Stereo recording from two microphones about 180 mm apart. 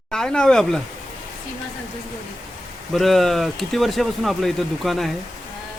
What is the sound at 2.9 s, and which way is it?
Speech, centre (ahead or behind).